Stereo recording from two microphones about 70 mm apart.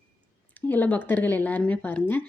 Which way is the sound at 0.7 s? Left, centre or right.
Left.